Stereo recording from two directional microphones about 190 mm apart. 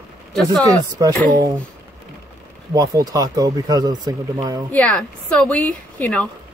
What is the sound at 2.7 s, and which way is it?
Speech, 20° right (ahead or behind).